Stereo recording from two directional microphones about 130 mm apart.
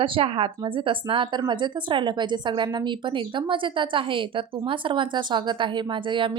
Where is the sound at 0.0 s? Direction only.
45° right (ahead or behind).